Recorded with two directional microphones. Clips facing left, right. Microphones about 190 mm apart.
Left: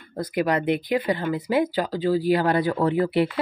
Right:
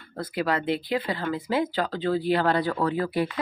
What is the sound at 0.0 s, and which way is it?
Speech, 15° left (ahead or behind).